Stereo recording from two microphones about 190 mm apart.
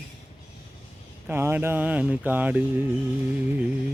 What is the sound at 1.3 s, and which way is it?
Speech, 10° right (ahead or behind).